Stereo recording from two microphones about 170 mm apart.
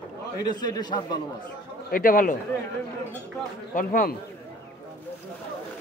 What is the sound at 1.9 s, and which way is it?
Speech, 55° left (ahead or behind).